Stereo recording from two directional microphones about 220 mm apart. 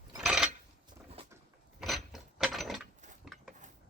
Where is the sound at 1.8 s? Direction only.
Centre (ahead or behind).